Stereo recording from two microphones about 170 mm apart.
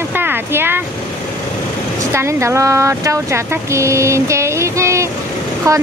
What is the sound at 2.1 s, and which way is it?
A woman's voice, 15° right (ahead or behind).